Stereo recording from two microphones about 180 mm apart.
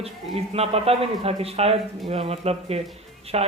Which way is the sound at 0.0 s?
35° right (ahead or behind).